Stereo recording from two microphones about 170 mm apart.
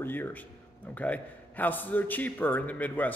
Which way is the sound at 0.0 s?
10° left (ahead or behind).